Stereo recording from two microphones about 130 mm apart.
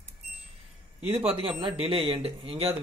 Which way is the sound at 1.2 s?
45° right (ahead or behind).